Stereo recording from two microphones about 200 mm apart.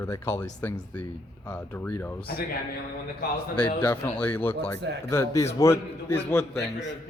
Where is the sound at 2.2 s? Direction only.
50° left (ahead or behind).